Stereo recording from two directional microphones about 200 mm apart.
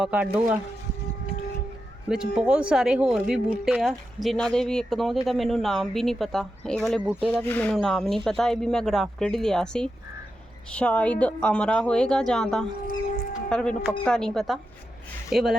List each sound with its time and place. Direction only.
0.0 s speech: 5° right (ahead or behind)
2.0 s speech: 5° right (ahead or behind)